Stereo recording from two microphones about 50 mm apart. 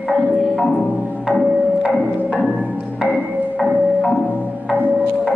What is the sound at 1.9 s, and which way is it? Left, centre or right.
Music, right.